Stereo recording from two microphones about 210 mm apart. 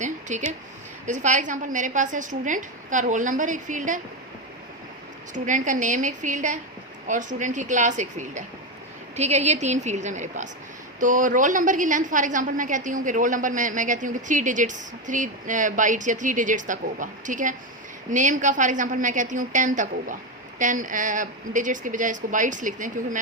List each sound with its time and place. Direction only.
0.0 s a sound: 35° right (ahead or behind)
1.0 s a woman's voice: 35° right (ahead or behind)
5.3 s a woman's voice: 35° right (ahead or behind)